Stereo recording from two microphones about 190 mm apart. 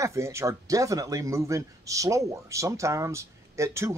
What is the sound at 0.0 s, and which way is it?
A man's voice, 15° right (ahead or behind).